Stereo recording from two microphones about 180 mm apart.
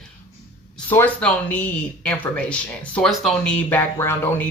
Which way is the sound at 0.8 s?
10° left (ahead or behind).